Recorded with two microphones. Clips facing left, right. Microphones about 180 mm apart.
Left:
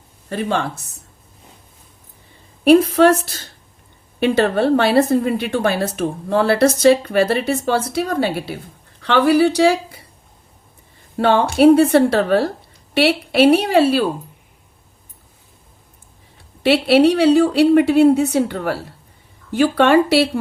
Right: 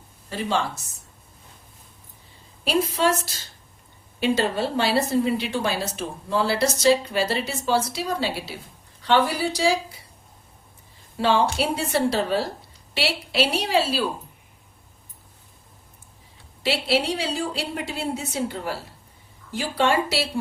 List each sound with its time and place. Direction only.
0.3 s a woman's voice: 55° left (ahead or behind)
2.6 s a woman's voice: 60° left (ahead or behind)
9.0 s speech: 65° left (ahead or behind)
11.2 s a woman's voice: 55° left (ahead or behind)
16.6 s a woman's voice: 60° left (ahead or behind)